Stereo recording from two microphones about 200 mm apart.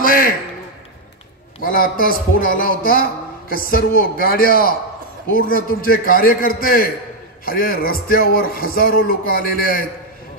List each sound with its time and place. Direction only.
0.0 s a man's voice: 45° left (ahead or behind)
1.6 s a man's voice: 45° left (ahead or behind)